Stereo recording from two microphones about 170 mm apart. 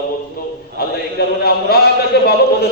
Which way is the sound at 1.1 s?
65° left (ahead or behind).